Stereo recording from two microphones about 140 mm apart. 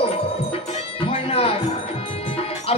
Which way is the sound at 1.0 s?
45° left (ahead or behind).